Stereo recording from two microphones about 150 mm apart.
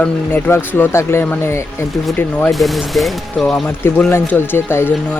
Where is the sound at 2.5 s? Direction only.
Centre (ahead or behind).